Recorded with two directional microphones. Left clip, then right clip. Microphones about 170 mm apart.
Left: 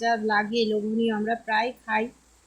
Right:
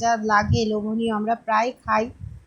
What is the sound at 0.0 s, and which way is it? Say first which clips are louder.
A woman's voice: right 4 dB; 20° right (ahead or behind).